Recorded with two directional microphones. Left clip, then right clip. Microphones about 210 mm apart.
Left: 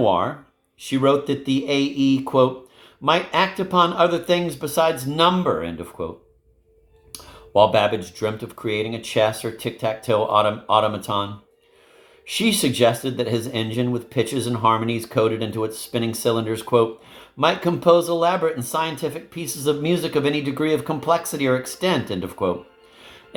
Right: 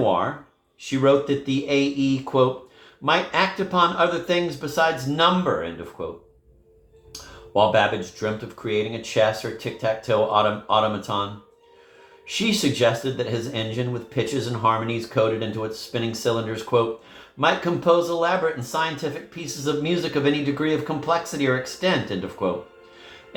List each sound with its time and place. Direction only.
0.0 s speech: 50° left (ahead or behind)
7.5 s speech: 50° left (ahead or behind)
12.3 s speech: 50° left (ahead or behind)